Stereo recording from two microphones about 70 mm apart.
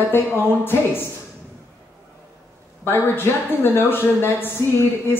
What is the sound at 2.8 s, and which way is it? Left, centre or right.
Speech, left.